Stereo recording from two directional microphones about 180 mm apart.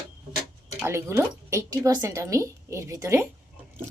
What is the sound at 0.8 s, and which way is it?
Speech, 15° right (ahead or behind).